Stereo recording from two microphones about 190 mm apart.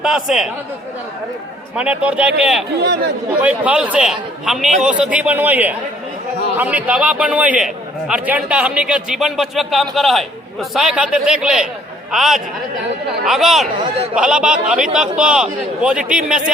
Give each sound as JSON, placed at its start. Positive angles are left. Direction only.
{"t": 0.0, "sound": "a man's voice", "side_deg": 0}
{"t": 1.7, "sound": "a man's voice", "side_deg": -5}
{"t": 2.8, "sound": "speech", "side_deg": -60}
{"t": 3.4, "sound": "a man's voice", "side_deg": -5}